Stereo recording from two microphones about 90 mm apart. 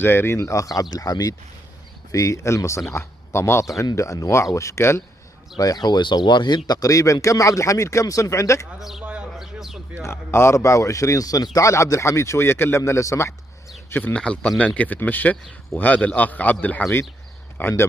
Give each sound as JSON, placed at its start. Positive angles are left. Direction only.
{"t": 0.0, "sound": "speech", "side_deg": 25}
{"t": 5.6, "sound": "speech", "side_deg": 50}
{"t": 8.7, "sound": "a man's voice", "side_deg": -5}
{"t": 9.0, "sound": "a sound", "side_deg": -10}
{"t": 10.0, "sound": "a man's voice", "side_deg": 30}
{"t": 14.1, "sound": "a man's voice", "side_deg": 10}